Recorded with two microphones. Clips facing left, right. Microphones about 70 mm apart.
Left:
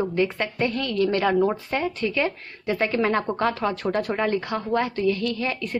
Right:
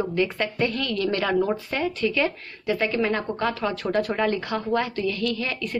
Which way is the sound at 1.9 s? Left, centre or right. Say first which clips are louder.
Right 4 dB; left.